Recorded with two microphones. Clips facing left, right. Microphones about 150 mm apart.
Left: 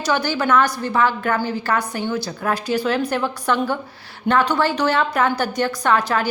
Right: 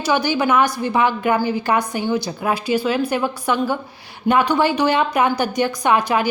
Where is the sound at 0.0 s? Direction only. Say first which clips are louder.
Right 2 dB; 15° right (ahead or behind).